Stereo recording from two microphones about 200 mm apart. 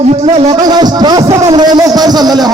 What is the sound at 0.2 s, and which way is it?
Music, 35° right (ahead or behind).